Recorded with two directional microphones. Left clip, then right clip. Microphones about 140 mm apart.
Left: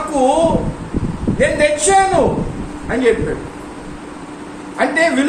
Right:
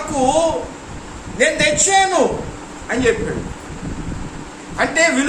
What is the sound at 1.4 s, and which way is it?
Speech, 25° right (ahead or behind).